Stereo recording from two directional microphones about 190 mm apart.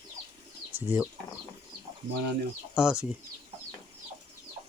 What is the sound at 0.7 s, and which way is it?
Speech, 10° right (ahead or behind).